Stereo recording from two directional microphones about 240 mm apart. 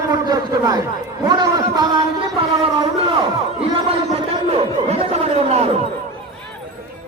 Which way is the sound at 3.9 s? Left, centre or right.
Right.